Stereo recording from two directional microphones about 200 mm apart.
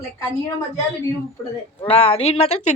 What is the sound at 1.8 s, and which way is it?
Speech, 30° left (ahead or behind).